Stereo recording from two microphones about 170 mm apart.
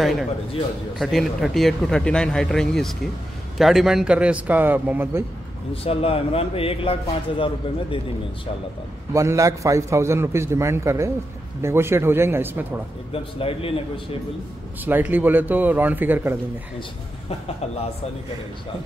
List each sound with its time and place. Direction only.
0.9 s a man's voice: centre (ahead or behind)
5.9 s a man's voice: 35° left (ahead or behind)
9.1 s a man's voice: 15° right (ahead or behind)
13.1 s a man's voice: 35° left (ahead or behind)
14.9 s a man's voice: 10° right (ahead or behind)